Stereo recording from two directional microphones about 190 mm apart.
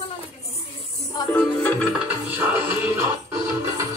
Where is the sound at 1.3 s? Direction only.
10° left (ahead or behind).